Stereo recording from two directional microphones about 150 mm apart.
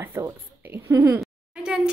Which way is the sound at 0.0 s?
15° right (ahead or behind).